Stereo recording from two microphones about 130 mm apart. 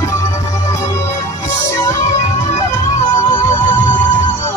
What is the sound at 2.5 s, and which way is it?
Music, 25° left (ahead or behind).